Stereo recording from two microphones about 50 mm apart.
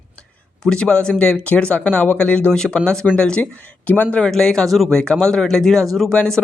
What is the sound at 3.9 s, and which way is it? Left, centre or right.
Speech, left.